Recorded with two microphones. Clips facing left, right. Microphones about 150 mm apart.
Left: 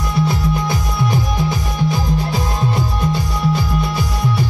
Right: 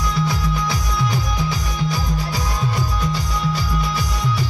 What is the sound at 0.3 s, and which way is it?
Music, 25° left (ahead or behind).